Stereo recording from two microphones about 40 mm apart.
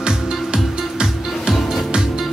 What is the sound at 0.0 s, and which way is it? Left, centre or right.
Music, right.